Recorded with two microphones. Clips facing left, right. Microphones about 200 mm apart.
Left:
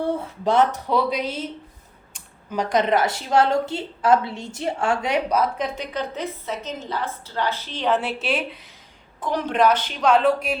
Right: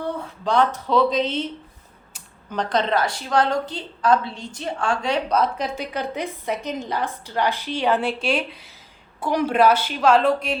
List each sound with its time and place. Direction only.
0.4 s speech: 20° left (ahead or behind)
2.5 s a woman's voice: 10° left (ahead or behind)
5.6 s a woman's voice: 10° right (ahead or behind)
7.9 s a woman's voice: 5° left (ahead or behind)
9.2 s a woman's voice: 10° right (ahead or behind); by 10.6 s 5° left (ahead or behind)